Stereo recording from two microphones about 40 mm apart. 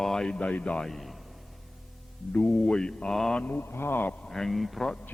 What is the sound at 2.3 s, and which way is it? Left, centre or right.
Speech, left.